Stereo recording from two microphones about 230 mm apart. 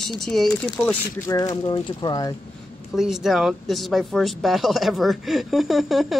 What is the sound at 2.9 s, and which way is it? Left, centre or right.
Speech, centre.